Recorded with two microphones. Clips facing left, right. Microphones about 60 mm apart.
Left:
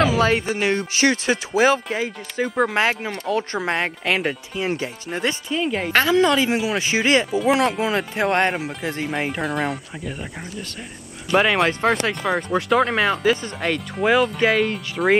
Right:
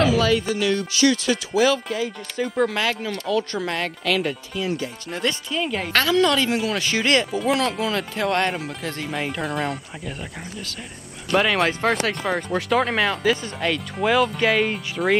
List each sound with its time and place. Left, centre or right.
0.0 s music: left
2.3 s speech: centre
2.7 s music: left
5.5 s speech: centre; by 8.5 s left
8.5 s speech: centre
11.2 s speech: centre
11.6 s speech: centre